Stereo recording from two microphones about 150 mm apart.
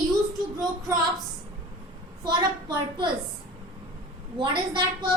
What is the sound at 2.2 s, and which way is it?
Speech, 30° right (ahead or behind).